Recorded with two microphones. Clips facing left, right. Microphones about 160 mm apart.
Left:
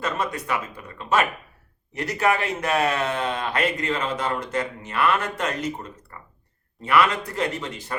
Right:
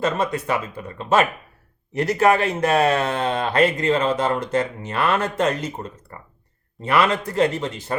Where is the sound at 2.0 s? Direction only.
35° right (ahead or behind).